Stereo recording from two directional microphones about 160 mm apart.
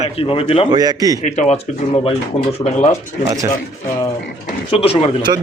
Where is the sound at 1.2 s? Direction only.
45° left (ahead or behind).